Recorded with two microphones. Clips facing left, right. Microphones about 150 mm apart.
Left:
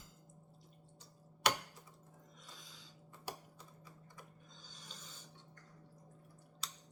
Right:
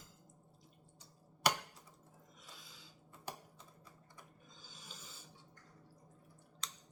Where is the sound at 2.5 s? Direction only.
5° right (ahead or behind).